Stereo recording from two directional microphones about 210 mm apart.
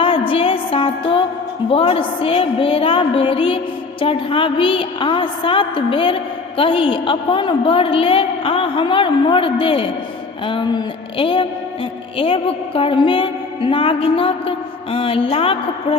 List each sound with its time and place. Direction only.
0.0 s music: 25° left (ahead or behind)
1.7 s a woman's voice: 25° left (ahead or behind)